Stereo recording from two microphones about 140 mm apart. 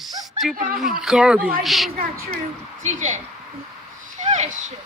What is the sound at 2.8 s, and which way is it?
Speech, 55° right (ahead or behind).